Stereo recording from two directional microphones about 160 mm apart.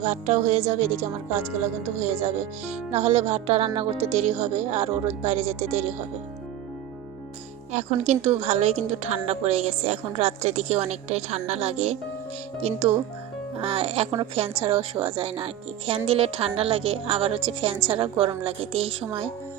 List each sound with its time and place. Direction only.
0.0 s speech: 45° right (ahead or behind)
2.9 s a woman's voice: 40° right (ahead or behind)
7.7 s a woman's voice: 45° right (ahead or behind)